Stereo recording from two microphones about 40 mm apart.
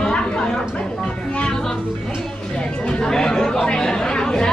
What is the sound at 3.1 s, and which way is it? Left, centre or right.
Speech, centre.